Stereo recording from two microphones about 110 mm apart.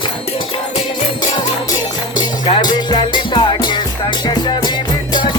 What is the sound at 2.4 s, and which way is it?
Music, 45° left (ahead or behind).